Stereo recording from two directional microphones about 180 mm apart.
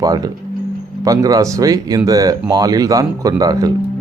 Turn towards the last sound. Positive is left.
turn(degrees=-20)  # may be behind; listen again after turning